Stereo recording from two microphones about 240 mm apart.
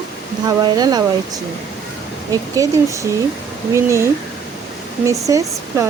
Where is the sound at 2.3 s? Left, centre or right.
Centre.